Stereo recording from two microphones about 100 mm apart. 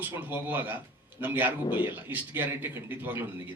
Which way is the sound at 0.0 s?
20° right (ahead or behind).